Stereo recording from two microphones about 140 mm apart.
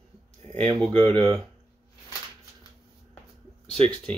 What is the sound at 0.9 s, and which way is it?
Speech, 40° right (ahead or behind).